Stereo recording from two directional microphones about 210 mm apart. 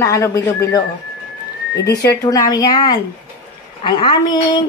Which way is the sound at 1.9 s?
15° left (ahead or behind).